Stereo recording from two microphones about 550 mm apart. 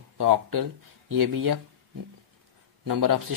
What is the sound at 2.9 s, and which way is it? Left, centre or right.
Speech, right.